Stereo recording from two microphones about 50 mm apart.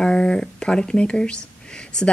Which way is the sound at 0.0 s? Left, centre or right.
Centre.